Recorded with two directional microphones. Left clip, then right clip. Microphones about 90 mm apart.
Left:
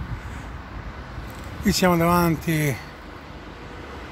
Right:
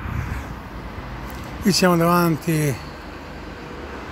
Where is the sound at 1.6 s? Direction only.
35° left (ahead or behind).